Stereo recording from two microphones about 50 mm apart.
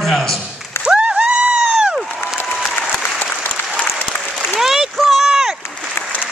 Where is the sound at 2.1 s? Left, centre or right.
Centre.